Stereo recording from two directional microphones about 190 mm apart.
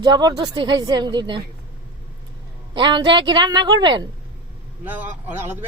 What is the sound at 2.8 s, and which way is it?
A man's voice, 25° right (ahead or behind).